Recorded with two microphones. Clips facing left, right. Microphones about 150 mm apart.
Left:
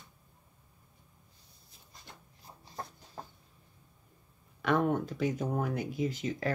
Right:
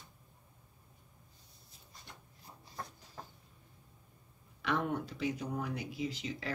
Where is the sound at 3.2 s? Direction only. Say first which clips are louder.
Left 4 dB; 35° left (ahead or behind).